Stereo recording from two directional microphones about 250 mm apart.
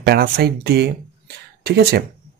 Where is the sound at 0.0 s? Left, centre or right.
Right.